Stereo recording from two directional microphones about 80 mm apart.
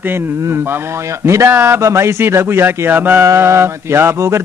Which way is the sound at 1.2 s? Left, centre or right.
Right.